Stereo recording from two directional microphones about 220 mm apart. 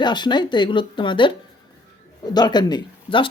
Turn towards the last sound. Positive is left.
turn(degrees=25)  # may be behind; listen again after turning